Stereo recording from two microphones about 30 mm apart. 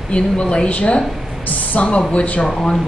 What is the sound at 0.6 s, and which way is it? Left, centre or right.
Speech, left.